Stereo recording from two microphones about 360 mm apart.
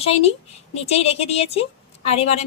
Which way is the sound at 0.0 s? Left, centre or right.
Centre.